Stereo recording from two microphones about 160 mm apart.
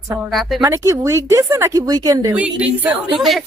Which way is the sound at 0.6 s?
20° right (ahead or behind).